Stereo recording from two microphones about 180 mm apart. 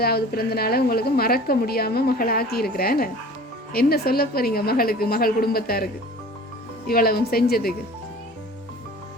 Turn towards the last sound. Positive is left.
turn(degrees=60)  # may be behind; listen again after turning